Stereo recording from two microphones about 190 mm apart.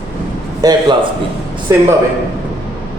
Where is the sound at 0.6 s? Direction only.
20° right (ahead or behind).